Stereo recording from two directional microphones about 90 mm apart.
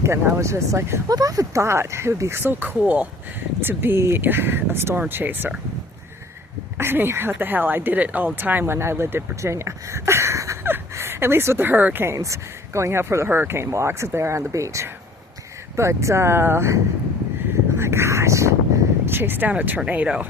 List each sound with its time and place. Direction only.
0.0 s speech: 30° right (ahead or behind)
1.1 s speech: 40° right (ahead or behind); by 5.5 s 20° right (ahead or behind)
6.7 s speech: 25° right (ahead or behind)
17.7 s a sound: 30° right (ahead or behind)
19.0 s speech: 25° right (ahead or behind)